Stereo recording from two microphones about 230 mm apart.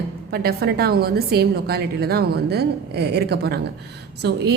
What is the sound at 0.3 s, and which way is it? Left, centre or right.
A woman's voice, right.